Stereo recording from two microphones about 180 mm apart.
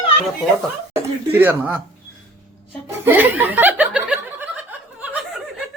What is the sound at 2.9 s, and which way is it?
Chuckle, 10° right (ahead or behind).